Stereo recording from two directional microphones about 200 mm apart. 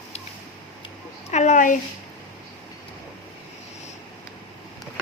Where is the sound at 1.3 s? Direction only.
35° left (ahead or behind).